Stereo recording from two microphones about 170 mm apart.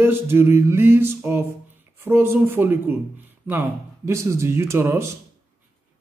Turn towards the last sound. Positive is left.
turn(degrees=-15)  # may be behind; listen again after turning